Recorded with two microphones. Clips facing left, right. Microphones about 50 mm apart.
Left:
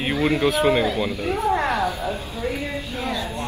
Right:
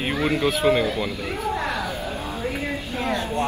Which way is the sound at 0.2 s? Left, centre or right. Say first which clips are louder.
Left 2 dB; left.